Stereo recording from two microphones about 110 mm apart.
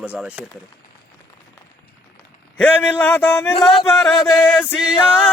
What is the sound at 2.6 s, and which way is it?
Speech, 15° left (ahead or behind).